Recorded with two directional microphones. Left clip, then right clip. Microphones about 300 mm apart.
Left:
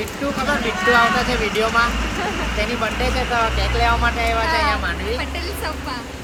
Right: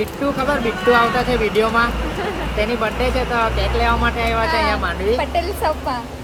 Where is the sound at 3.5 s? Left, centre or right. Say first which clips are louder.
Right 1 dB; centre.